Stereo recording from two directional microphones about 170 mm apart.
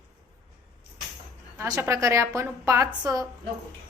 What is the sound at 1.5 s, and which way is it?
A woman's voice, 15° right (ahead or behind).